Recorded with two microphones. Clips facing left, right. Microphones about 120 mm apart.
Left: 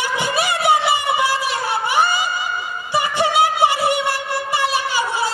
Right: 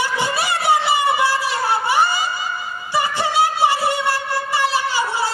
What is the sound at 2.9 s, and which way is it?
Music, 20° left (ahead or behind).